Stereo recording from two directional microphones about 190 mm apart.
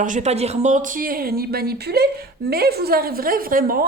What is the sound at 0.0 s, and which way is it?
Speech, 40° right (ahead or behind).